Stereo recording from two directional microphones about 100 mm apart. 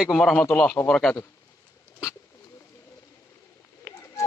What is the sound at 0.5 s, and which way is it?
Speech, 10° left (ahead or behind).